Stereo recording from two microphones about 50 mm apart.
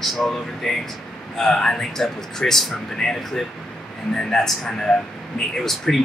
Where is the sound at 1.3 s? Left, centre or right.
Centre.